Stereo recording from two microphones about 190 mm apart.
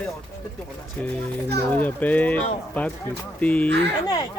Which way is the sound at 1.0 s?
5° left (ahead or behind).